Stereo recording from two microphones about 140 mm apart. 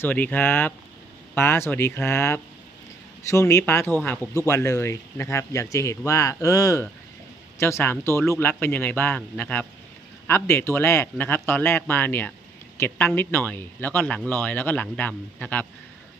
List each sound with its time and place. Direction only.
0.0 s a man's voice: 15° left (ahead or behind)